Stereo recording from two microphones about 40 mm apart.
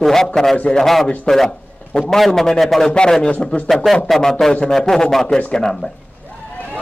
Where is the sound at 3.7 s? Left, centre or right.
Centre.